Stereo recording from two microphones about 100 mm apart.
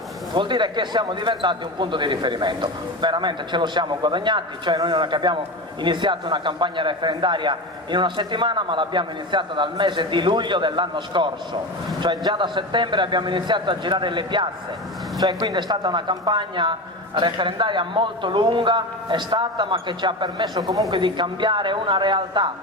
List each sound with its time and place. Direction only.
0.3 s a man's voice: 50° right (ahead or behind)
15.2 s a man's voice: 40° right (ahead or behind)
20.9 s a man's voice: 55° right (ahead or behind)